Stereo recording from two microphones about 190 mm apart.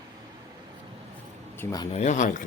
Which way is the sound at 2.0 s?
40° left (ahead or behind).